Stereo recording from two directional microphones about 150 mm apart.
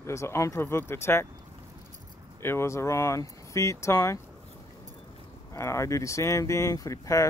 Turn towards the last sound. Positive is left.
turn(degrees=20)  # may be behind; listen again after turning